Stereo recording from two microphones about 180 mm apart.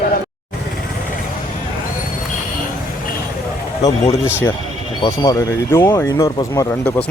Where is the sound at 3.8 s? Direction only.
15° left (ahead or behind).